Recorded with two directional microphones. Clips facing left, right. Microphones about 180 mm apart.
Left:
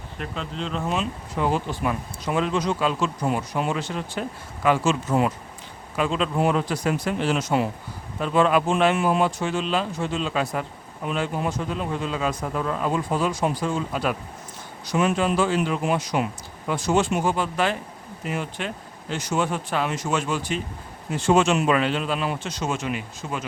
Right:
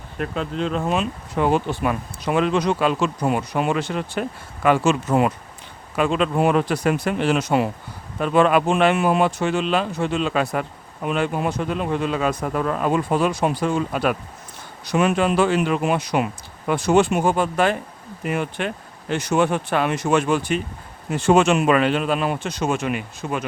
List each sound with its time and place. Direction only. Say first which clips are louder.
0.2 s speech: right 7 dB; 50° right (ahead or behind)